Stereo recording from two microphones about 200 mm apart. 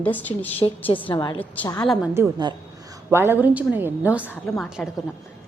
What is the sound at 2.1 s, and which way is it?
A woman's voice, 15° right (ahead or behind).